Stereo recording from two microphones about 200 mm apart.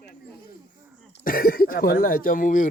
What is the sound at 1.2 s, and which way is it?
A man's voice, 45° left (ahead or behind).